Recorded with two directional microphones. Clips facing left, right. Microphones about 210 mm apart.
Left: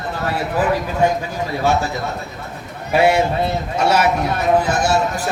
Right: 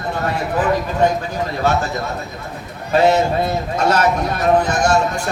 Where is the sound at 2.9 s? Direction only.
10° left (ahead or behind).